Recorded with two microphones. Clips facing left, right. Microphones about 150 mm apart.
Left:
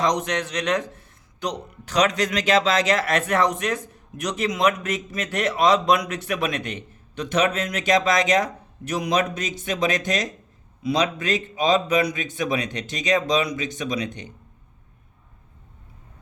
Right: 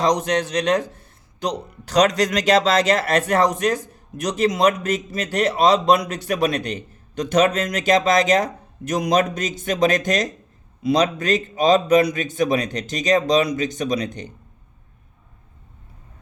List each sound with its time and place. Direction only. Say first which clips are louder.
0.0 s a man's voice: right 4 dB; 35° right (ahead or behind)